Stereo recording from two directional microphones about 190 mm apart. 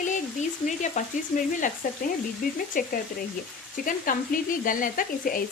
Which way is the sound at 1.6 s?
45° left (ahead or behind).